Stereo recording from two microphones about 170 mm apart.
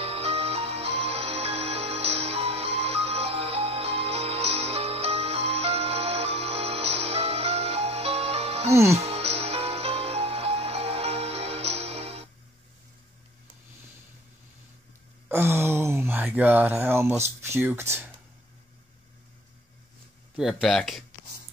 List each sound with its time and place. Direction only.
0.0 s music: 35° right (ahead or behind)
15.2 s a sound: 15° right (ahead or behind)
20.3 s speech: centre (ahead or behind)